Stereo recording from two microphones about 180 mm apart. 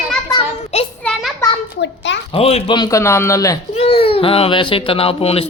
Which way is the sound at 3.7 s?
30° left (ahead or behind).